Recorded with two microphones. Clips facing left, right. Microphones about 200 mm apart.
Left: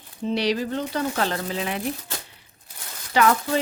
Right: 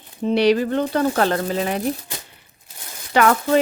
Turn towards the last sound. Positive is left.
turn(degrees=-60)  # may be behind; listen again after turning